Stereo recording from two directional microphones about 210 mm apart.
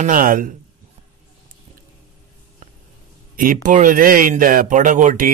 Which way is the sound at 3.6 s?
40° right (ahead or behind).